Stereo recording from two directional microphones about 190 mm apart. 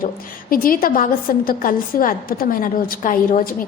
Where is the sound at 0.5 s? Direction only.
50° left (ahead or behind).